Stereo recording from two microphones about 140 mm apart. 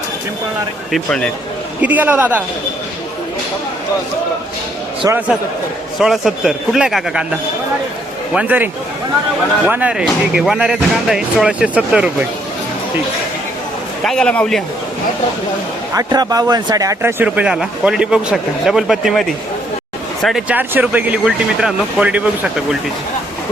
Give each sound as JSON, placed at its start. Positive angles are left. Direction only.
{"t": 0.9, "sound": "a man's voice", "side_deg": 0}
{"t": 1.8, "sound": "speech", "side_deg": -10}
{"t": 5.0, "sound": "a man's voice", "side_deg": -25}
{"t": 6.0, "sound": "a man's voice", "side_deg": -5}
{"t": 8.3, "sound": "speech", "side_deg": -10}
{"t": 14.0, "sound": "a man's voice", "side_deg": 5}
{"t": 15.9, "sound": "speech", "side_deg": -25}
{"t": 20.2, "sound": "a man's voice", "side_deg": 0}